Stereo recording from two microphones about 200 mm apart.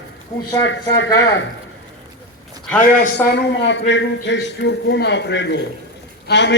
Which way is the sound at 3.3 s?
60° left (ahead or behind).